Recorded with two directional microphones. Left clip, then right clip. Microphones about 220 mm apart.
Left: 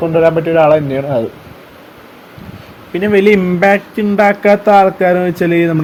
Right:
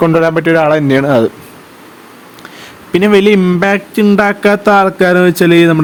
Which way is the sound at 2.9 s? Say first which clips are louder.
Right 2 dB; 30° right (ahead or behind).